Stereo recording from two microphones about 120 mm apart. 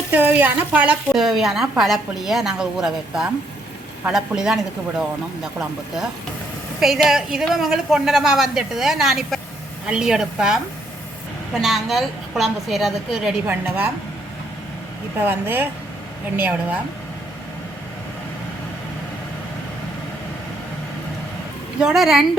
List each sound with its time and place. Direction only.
0.1 s a woman's voice: 15° right (ahead or behind)
6.7 s a woman's voice: 5° right (ahead or behind)
11.6 s a woman's voice: centre (ahead or behind)
13.5 s a woman's voice: 15° right (ahead or behind)
15.2 s a woman's voice: 15° right (ahead or behind)
21.8 s a woman's voice: 5° right (ahead or behind)